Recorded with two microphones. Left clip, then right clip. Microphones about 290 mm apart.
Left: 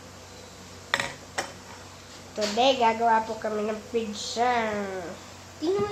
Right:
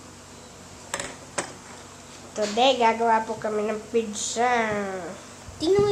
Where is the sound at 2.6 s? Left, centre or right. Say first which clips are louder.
Right 2 dB; centre.